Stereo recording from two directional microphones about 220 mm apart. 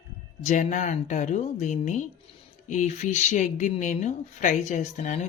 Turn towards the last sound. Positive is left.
turn(degrees=35)  # may be behind; listen again after turning